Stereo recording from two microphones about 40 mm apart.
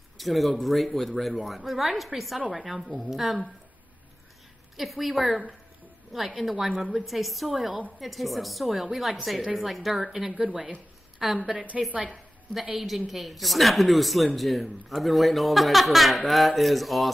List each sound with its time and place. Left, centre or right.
0.2 s a woman's voice: centre
4.7 s a woman's voice: centre
6.5 s a woman's voice: centre
7.1 s a woman's voice: centre
10.3 s speech: centre
11.5 s a woman's voice: right
12.7 s a woman's voice: centre